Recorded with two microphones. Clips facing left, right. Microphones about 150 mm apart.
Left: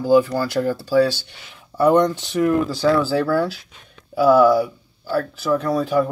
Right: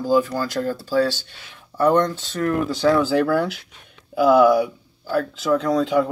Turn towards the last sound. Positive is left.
turn(degrees=-20)  # may be behind; listen again after turning